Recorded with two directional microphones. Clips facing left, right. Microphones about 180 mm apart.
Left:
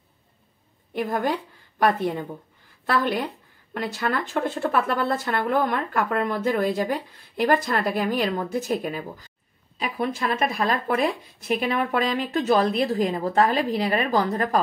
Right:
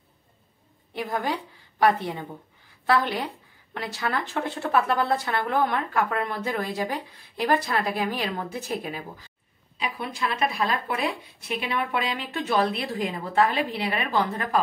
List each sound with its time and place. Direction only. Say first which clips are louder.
0.9 s a woman's voice: left 4 dB; 50° left (ahead or behind)